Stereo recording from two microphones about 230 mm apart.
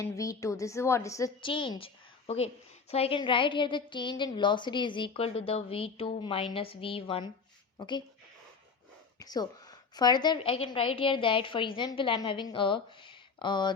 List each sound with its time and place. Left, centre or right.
0.0 s a woman's voice: centre
9.1 s a woman's voice: centre